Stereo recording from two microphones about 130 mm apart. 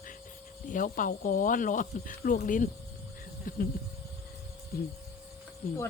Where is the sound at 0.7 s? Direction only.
90° left.